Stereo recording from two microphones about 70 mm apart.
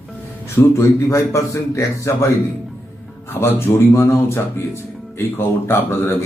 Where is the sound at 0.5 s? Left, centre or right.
Left.